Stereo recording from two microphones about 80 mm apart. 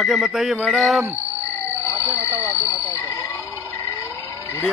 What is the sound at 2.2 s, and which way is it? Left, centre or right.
Music, right.